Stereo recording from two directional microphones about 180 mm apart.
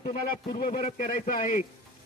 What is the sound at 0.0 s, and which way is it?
A man's voice, 45° left (ahead or behind).